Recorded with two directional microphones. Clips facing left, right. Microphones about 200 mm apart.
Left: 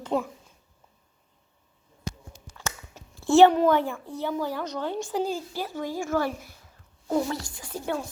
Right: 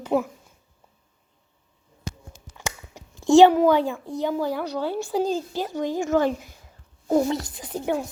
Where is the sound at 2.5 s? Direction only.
15° right (ahead or behind).